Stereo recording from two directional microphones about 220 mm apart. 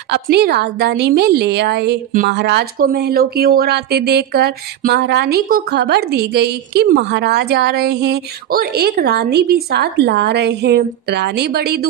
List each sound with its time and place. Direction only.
0.1 s a woman's voice: 50° right (ahead or behind)